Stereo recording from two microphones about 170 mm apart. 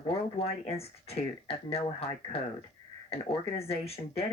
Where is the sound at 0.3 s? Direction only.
35° left (ahead or behind).